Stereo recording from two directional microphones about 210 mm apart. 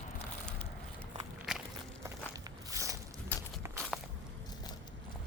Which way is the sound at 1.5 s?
Centre (ahead or behind).